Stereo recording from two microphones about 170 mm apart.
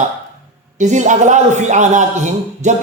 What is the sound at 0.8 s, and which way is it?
Speech, 45° right (ahead or behind).